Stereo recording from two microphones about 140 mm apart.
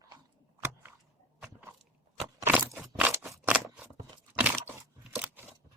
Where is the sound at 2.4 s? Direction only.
15° right (ahead or behind).